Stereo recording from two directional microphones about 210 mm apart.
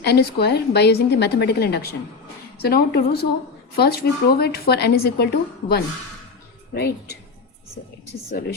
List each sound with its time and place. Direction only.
0.0 s a woman's voice: 50° left (ahead or behind)